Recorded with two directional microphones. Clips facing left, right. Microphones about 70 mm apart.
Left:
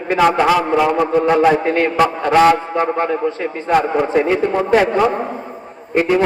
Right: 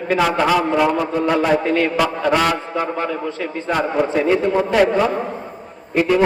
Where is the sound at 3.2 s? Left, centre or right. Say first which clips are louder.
Left 4 dB; left.